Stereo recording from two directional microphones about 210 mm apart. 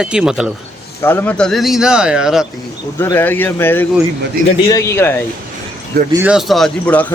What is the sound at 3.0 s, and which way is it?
Speech, 10° left (ahead or behind).